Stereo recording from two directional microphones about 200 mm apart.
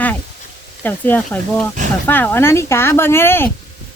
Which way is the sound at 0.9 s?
10° left (ahead or behind).